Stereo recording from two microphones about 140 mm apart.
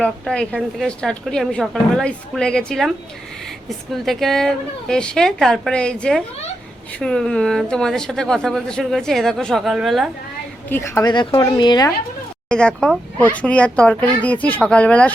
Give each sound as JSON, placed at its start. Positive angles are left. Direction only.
{"t": 0.0, "sound": "a woman's voice", "side_deg": 5}
{"t": 3.9, "sound": "a woman's voice", "side_deg": 0}
{"t": 10.7, "sound": "speech", "side_deg": 15}
{"t": 11.0, "sound": "speech", "side_deg": 35}
{"t": 12.5, "sound": "speech", "side_deg": 5}